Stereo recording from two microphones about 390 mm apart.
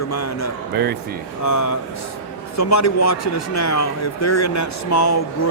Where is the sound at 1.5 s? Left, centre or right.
Left.